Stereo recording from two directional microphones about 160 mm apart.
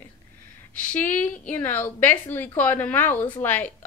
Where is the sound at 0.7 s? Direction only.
10° left (ahead or behind).